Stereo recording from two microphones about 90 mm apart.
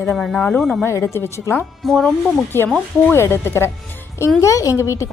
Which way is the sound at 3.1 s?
30° left (ahead or behind).